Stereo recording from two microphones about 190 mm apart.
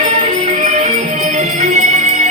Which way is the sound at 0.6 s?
40° right (ahead or behind).